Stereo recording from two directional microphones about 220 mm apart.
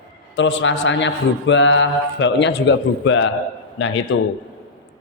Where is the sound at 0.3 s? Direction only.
55° left (ahead or behind).